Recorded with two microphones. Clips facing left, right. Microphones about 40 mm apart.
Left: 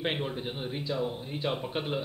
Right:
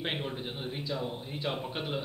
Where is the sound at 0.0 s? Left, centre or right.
Centre.